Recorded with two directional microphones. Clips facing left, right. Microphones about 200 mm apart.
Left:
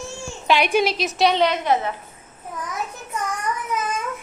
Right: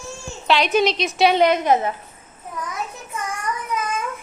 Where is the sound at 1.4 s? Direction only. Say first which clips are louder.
Right 3 dB; 45° right (ahead or behind).